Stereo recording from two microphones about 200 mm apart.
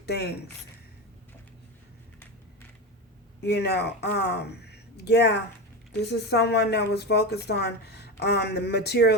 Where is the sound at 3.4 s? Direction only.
55° left (ahead or behind).